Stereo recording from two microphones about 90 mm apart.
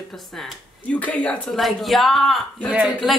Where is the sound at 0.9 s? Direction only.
15° left (ahead or behind).